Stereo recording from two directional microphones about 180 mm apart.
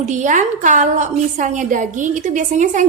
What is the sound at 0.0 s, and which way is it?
A woman's voice, 40° right (ahead or behind).